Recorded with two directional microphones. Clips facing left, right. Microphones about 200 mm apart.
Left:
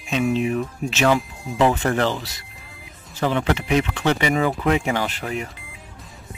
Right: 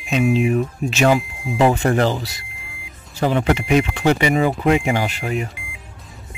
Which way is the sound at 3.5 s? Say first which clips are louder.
Right 3 dB; 15° right (ahead or behind).